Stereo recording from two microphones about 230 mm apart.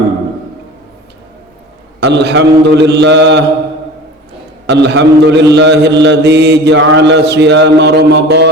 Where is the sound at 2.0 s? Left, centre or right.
Right.